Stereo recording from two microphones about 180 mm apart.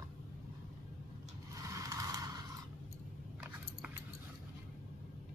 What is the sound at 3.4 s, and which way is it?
Keys jangling, 5° right (ahead or behind).